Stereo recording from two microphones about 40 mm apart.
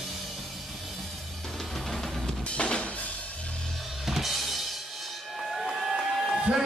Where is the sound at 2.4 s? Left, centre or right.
Left.